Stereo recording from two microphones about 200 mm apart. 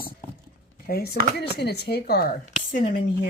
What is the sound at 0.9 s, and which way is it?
Speech, 55° left (ahead or behind).